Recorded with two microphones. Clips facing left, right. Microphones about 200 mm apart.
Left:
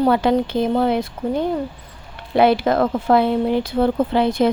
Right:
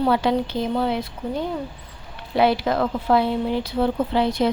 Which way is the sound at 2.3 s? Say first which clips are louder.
Left 4 dB; 55° left (ahead or behind).